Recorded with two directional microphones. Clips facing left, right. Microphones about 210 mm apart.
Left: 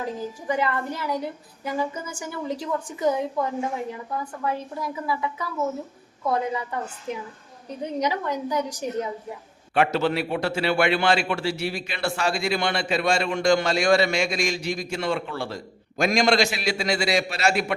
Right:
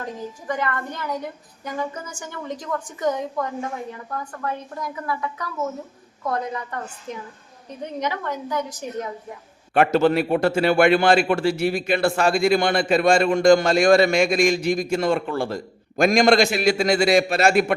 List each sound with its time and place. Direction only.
0.0 s a woman's voice: 10° left (ahead or behind)
8.0 s a woman's voice: 10° left (ahead or behind)
9.7 s a man's voice: 50° right (ahead or behind)